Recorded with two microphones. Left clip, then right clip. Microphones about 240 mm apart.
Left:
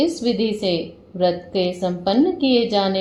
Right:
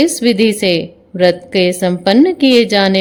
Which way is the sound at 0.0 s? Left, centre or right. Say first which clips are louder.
Right 8 dB; right.